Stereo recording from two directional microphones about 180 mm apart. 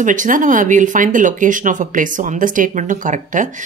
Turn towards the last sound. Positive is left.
turn(degrees=-45)  # may be behind; listen again after turning